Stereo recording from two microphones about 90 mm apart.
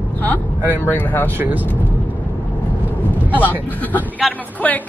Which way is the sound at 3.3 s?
20° left (ahead or behind).